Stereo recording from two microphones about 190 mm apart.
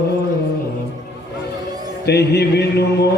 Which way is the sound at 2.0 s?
60° left (ahead or behind).